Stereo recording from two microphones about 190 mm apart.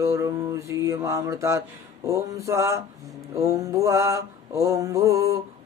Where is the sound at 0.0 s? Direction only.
15° right (ahead or behind).